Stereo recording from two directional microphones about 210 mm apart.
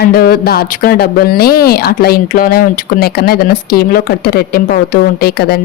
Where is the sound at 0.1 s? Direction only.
45° left (ahead or behind).